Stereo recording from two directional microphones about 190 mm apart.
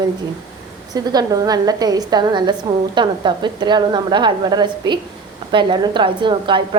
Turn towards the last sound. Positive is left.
turn(degrees=-25)  # may be behind; listen again after turning